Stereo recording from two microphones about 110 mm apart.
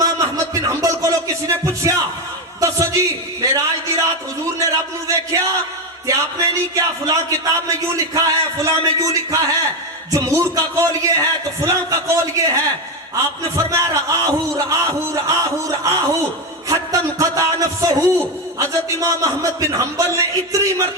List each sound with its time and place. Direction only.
0.0 s music: 30° right (ahead or behind)
2.6 s a man's voice: 30° right (ahead or behind)
6.7 s a man's voice: 30° right (ahead or behind)